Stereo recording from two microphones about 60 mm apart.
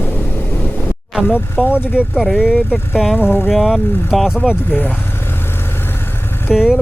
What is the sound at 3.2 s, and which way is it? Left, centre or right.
Speech, left.